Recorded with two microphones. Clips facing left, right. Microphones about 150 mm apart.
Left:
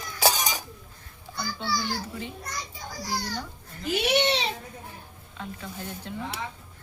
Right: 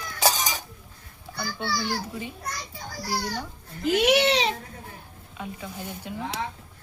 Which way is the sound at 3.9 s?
90° right.